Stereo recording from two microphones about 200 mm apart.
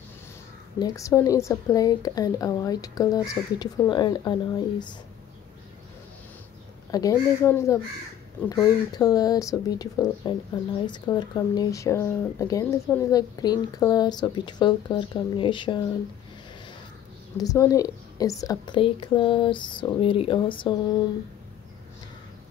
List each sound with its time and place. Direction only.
0.7 s a woman's voice: 15° left (ahead or behind)
6.9 s a woman's voice: 15° left (ahead or behind)
17.4 s speech: 15° left (ahead or behind)